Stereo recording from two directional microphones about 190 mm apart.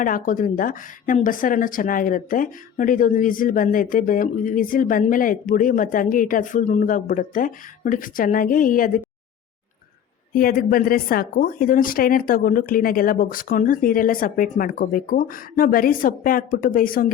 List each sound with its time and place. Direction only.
0.0 s a woman's voice: 45° left (ahead or behind)
10.3 s a woman's voice: 50° left (ahead or behind)